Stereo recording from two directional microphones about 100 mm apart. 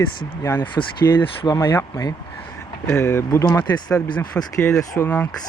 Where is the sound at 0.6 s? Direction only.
60° left (ahead or behind).